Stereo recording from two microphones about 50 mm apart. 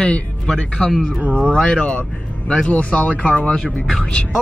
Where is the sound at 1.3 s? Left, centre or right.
Centre.